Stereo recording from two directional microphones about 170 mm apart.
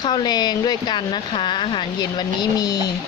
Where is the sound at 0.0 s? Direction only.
25° left (ahead or behind).